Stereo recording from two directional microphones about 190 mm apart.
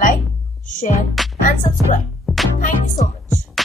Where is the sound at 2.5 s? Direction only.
45° left (ahead or behind).